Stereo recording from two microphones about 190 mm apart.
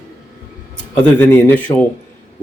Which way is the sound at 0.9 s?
10° left (ahead or behind).